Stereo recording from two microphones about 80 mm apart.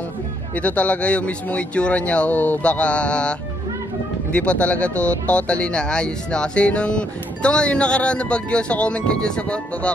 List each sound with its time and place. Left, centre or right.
0.6 s speech: centre